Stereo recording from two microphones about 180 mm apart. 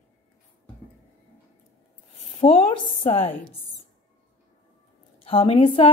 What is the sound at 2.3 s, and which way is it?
Speech, 35° left (ahead or behind).